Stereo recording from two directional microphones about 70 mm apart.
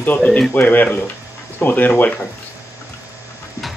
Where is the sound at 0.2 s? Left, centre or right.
Centre.